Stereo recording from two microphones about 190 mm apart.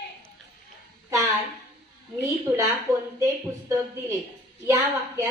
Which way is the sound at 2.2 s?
15° right (ahead or behind).